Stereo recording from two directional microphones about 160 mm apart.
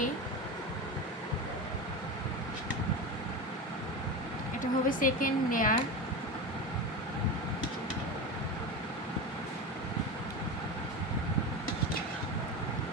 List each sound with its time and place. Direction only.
4.6 s speech: 55° left (ahead or behind)